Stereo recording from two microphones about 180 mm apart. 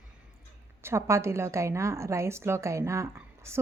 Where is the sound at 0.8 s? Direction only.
15° right (ahead or behind).